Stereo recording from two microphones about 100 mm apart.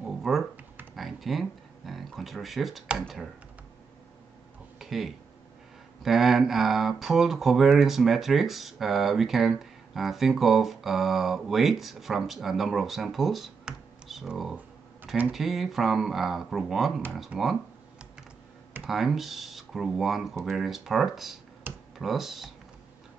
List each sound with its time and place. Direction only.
0.0 s computer keyboard: centre (ahead or behind)
0.9 s speech: centre (ahead or behind)
4.7 s a sound: centre (ahead or behind)
6.0 s speech: 5° right (ahead or behind)
17.3 s speech: 15° right (ahead or behind)
18.9 s speech: centre (ahead or behind)